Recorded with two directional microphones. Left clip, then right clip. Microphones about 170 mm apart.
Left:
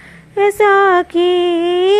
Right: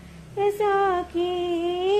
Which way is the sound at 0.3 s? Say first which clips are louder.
Left 11 dB; 40° left (ahead or behind).